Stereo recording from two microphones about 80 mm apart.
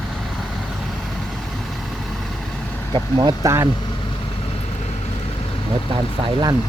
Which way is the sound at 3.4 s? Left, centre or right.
Right.